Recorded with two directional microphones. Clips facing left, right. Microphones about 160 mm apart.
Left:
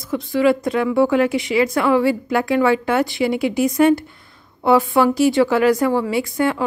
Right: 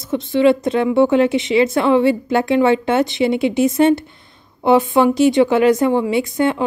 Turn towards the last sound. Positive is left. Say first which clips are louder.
# right 2 dB
turn(degrees=-20)  # may be behind; listen again after turning